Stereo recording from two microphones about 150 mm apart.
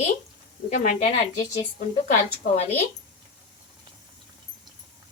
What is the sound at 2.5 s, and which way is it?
Speech, 45° left (ahead or behind).